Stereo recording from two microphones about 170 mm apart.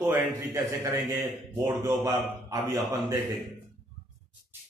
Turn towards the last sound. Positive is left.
turn(degrees=-15)  # may be behind; listen again after turning